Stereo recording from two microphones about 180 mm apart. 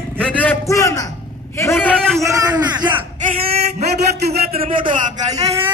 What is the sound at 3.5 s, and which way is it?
A man's voice, 35° right (ahead or behind).